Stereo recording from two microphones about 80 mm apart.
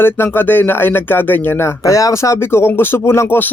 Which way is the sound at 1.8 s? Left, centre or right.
Left.